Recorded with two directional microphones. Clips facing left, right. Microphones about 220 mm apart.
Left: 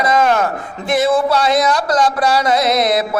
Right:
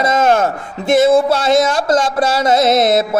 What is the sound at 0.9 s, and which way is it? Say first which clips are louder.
Music: right 4 dB; 25° right (ahead or behind).